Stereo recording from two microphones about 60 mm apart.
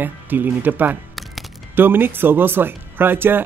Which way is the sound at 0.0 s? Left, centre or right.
Right.